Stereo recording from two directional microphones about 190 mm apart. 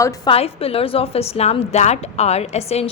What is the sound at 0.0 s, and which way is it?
Speech, 15° left (ahead or behind).